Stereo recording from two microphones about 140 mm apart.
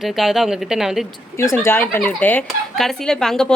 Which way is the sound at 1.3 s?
20° left (ahead or behind).